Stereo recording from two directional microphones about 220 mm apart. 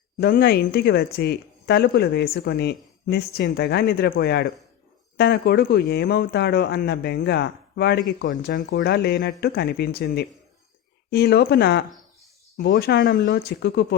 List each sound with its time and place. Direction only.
0.2 s speech: 45° left (ahead or behind)